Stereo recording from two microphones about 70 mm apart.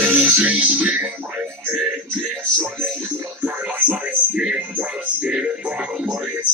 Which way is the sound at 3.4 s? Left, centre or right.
Right.